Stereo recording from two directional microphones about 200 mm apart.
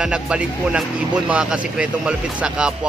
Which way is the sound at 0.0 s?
5° right (ahead or behind).